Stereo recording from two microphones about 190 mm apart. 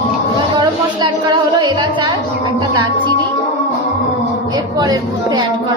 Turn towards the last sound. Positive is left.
turn(degrees=-20)  # may be behind; listen again after turning